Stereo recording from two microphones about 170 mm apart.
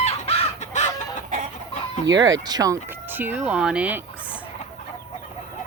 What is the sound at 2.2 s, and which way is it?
Speech, 20° right (ahead or behind).